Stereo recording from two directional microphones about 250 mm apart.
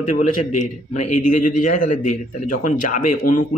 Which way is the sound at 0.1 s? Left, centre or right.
Left.